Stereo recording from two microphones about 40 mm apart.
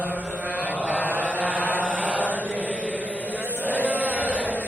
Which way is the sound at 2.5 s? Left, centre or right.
Left.